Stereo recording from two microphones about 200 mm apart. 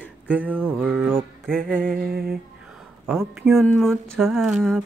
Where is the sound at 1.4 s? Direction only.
5° left (ahead or behind).